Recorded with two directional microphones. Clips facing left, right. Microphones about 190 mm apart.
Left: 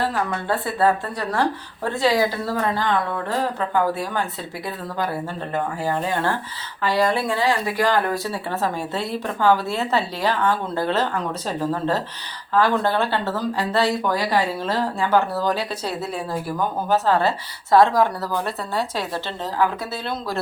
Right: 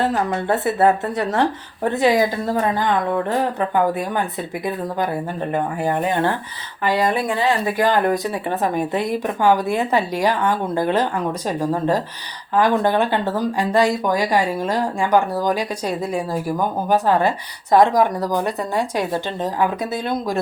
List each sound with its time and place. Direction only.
0.3 s a woman's voice: 20° right (ahead or behind)